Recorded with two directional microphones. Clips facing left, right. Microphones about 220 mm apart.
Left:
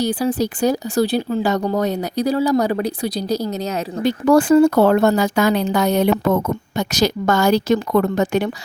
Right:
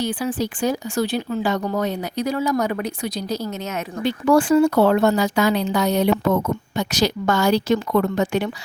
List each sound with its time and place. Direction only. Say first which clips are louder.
0.0 s speech: left 4 dB; 40° left (ahead or behind)